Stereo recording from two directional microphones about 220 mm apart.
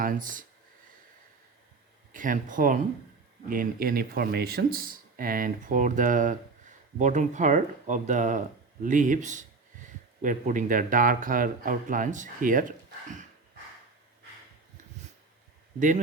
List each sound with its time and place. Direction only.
0.0 s speech: 40° right (ahead or behind)
2.1 s speech: 35° right (ahead or behind)